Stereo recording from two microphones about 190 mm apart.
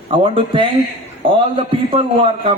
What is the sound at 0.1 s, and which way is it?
A man's voice, 25° right (ahead or behind).